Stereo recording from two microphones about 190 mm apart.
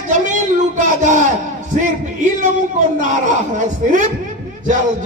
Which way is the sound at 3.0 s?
40° right (ahead or behind).